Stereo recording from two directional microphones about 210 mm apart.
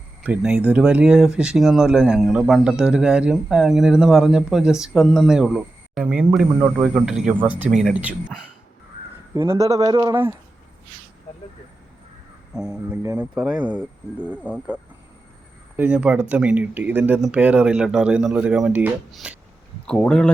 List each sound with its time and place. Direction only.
0.2 s speech: 5° right (ahead or behind)
9.3 s speech: 15° right (ahead or behind)
12.5 s speech: 5° right (ahead or behind)
15.7 s speech: 5° right (ahead or behind)